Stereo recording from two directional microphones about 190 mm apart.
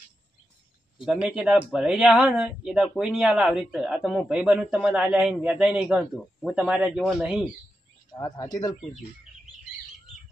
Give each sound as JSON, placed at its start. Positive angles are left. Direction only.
{"t": 1.0, "sound": "speech", "side_deg": -5}
{"t": 8.1, "sound": "speech", "side_deg": 20}